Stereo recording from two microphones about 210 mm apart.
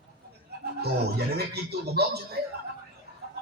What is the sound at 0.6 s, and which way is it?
A man's voice, 50° right (ahead or behind).